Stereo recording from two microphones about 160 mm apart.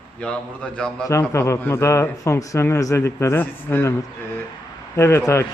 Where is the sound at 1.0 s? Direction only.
20° left (ahead or behind).